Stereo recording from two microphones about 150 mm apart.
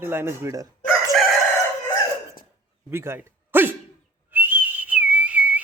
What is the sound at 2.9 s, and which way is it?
Speech, 15° right (ahead or behind).